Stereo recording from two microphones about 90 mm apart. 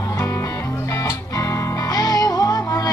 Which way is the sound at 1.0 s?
40° left (ahead or behind).